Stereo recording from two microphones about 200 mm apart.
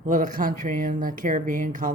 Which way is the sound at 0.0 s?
40° right (ahead or behind).